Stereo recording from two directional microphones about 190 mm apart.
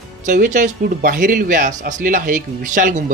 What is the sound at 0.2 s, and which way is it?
Speech, 40° right (ahead or behind).